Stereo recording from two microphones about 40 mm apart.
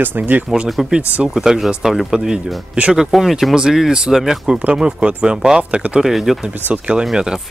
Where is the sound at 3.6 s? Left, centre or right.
Centre.